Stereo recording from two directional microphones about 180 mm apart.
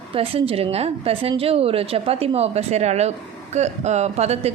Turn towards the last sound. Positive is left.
turn(degrees=-35)  # may be behind; listen again after turning